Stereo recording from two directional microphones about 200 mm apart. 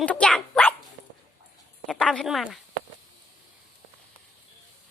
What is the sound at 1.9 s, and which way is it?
Speech, 5° left (ahead or behind).